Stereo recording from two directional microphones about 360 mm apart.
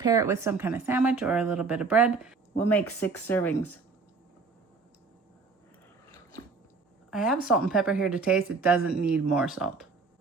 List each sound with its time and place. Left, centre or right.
0.0 s speech: centre
3.2 s speech: centre
7.1 s speech: centre